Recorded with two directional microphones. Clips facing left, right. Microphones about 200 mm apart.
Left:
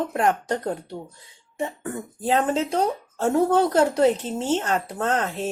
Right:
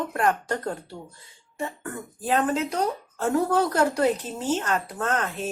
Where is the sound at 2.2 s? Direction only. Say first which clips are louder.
Left 2 dB; 25° left (ahead or behind).